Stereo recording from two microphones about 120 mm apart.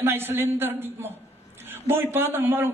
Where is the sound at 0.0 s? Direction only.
20° right (ahead or behind).